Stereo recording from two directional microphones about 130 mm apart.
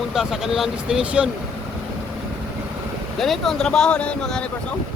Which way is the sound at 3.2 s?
Centre (ahead or behind).